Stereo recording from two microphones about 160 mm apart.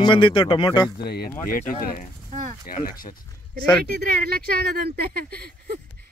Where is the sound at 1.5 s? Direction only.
60° left (ahead or behind).